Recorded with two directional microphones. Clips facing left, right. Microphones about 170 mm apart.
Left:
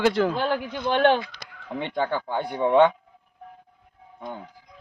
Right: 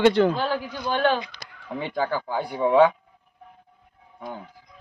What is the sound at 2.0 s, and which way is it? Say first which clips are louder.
Speech: even; centre (ahead or behind).